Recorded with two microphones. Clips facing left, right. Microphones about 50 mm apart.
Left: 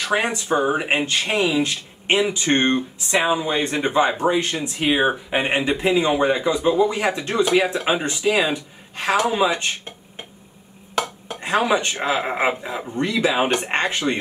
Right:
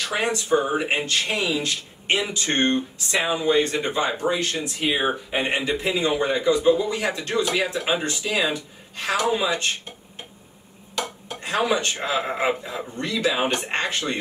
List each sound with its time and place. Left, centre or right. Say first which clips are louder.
0.1 s speech: left 1 dB; left
11.2 s speech: left 2 dB; left